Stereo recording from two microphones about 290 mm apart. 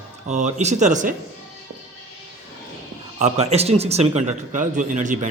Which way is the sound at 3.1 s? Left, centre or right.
Right.